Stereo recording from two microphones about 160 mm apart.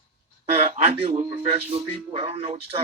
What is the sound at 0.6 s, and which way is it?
Speech, 40° right (ahead or behind).